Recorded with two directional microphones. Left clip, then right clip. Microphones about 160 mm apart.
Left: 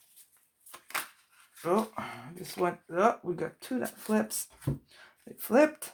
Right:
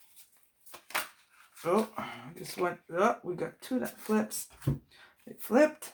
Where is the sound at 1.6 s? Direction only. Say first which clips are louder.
Even; 45° left (ahead or behind).